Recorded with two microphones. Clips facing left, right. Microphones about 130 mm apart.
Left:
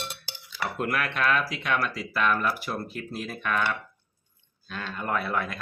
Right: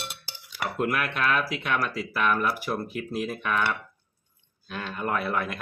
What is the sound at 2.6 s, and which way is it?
Speech, 15° right (ahead or behind).